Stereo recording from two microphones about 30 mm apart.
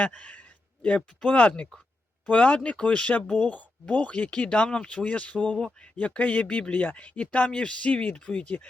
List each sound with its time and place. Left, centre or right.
0.0 s speech: left
3.4 s speech: left
4.4 s speech: left
5.0 s speech: left
7.4 s speech: left